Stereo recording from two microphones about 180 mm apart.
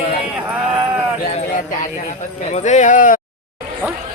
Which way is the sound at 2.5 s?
40° left (ahead or behind).